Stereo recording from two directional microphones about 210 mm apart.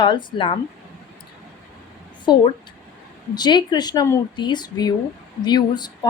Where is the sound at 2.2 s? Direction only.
20° left (ahead or behind).